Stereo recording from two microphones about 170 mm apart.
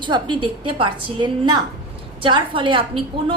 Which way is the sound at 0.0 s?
30° right (ahead or behind).